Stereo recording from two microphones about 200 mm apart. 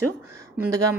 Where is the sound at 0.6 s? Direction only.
15° right (ahead or behind).